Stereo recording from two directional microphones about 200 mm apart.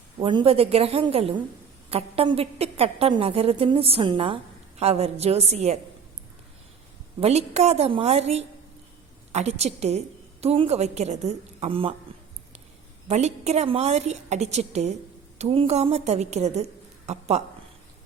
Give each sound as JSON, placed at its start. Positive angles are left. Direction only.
{"t": 0.2, "sound": "a woman's voice", "side_deg": -25}
{"t": 7.2, "sound": "a woman's voice", "side_deg": -30}
{"t": 13.1, "sound": "a woman's voice", "side_deg": -35}